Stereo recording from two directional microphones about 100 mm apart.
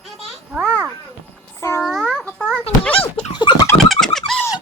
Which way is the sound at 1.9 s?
5° right (ahead or behind).